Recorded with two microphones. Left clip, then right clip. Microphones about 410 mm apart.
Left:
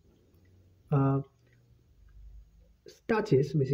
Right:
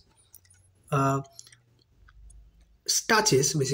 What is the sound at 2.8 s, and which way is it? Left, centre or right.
Speech, left.